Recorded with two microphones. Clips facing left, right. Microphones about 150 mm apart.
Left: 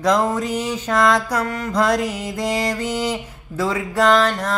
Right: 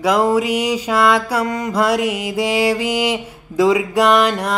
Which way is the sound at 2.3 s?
5° right (ahead or behind).